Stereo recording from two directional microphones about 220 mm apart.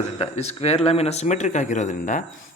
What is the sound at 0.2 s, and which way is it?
Speech, 30° left (ahead or behind).